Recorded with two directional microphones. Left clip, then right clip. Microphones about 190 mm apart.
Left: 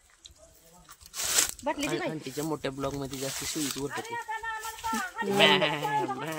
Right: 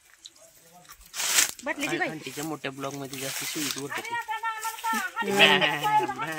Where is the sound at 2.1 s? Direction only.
60° left (ahead or behind).